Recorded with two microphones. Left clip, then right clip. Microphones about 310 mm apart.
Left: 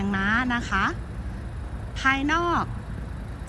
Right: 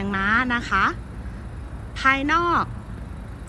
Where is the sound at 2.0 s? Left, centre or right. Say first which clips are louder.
Right 3 dB; centre.